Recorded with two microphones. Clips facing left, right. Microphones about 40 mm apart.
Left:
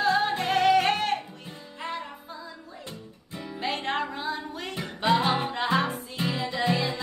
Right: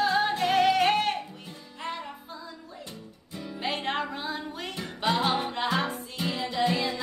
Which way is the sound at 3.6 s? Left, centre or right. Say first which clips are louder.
Left 1 dB; centre.